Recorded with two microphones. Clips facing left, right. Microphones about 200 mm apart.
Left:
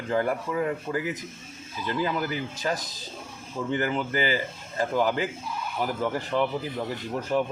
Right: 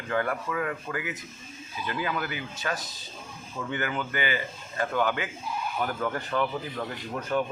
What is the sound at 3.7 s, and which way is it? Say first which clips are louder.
A man's voice: left 4 dB; 30° left (ahead or behind).